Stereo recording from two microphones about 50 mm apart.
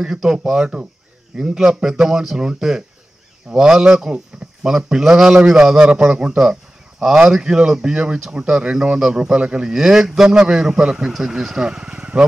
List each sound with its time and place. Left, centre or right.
0.0 s a man's voice: centre
0.6 s a man's voice: centre